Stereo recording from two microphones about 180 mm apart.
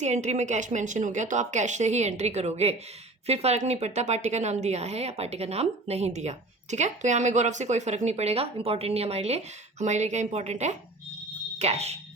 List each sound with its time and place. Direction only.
0.0 s a woman's voice: 40° right (ahead or behind)